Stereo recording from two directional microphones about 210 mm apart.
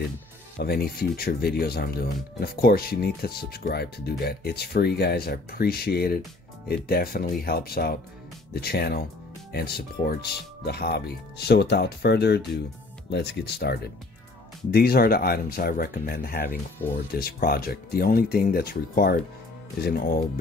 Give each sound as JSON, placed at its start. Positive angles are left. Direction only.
{"t": 0.6, "sound": "speech", "side_deg": 50}